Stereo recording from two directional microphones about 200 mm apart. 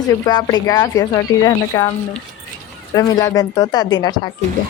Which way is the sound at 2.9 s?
15° left (ahead or behind).